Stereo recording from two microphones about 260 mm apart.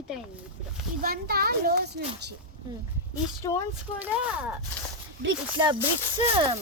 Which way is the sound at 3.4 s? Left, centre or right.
Centre.